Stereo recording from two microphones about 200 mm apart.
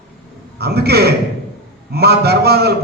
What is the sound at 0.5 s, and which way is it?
A man's voice, 55° right (ahead or behind).